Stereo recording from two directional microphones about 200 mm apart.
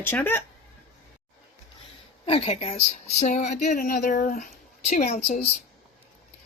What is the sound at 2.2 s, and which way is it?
Speech, 30° left (ahead or behind).